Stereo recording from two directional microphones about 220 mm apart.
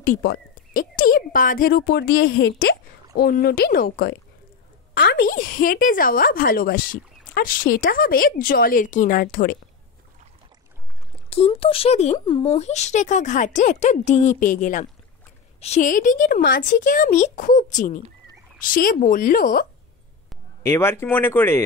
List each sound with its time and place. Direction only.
0.0 s a woman's voice: 45° left (ahead or behind)
11.2 s a woman's voice: 25° left (ahead or behind)
20.6 s speech: 10° left (ahead or behind)